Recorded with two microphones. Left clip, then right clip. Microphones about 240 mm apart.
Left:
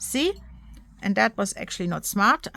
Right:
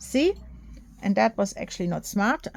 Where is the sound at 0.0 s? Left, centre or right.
Centre.